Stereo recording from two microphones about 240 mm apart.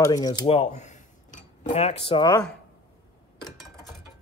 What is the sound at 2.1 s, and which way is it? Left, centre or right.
Speech, centre.